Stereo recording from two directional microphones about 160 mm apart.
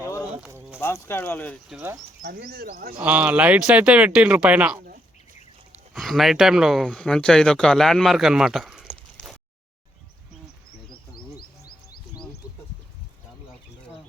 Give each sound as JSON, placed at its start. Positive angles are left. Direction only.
{"t": 0.0, "sound": "a sound", "side_deg": 20}
{"t": 0.4, "sound": "a sound", "side_deg": -10}
{"t": 0.8, "sound": "speech", "side_deg": 15}
{"t": 2.2, "sound": "speech", "side_deg": -70}
{"t": 3.0, "sound": "speech", "side_deg": -10}
{"t": 5.9, "sound": "speech", "side_deg": 0}